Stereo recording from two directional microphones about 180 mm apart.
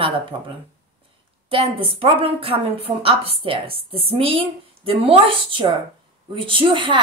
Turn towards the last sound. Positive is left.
turn(degrees=-30)  # may be behind; listen again after turning